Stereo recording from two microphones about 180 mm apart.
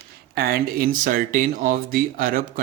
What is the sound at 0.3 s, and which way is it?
Speech, 55° right (ahead or behind).